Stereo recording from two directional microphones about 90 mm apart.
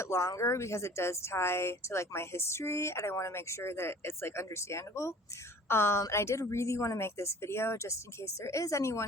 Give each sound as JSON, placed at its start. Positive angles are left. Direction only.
{"t": 0.0, "sound": "a woman's voice", "side_deg": 30}